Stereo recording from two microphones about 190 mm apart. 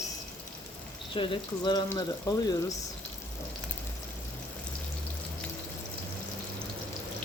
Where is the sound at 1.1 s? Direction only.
25° left (ahead or behind).